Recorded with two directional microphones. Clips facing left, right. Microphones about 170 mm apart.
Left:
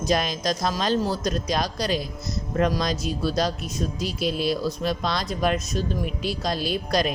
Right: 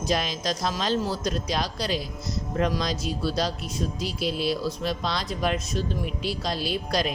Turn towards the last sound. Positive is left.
turn(degrees=50)  # may be behind; listen again after turning